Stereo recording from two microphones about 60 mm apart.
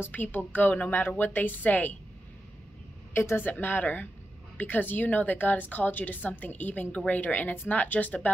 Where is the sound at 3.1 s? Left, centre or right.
Left.